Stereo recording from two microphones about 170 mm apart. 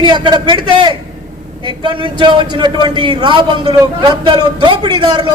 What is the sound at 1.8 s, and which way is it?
A man's voice, 30° right (ahead or behind).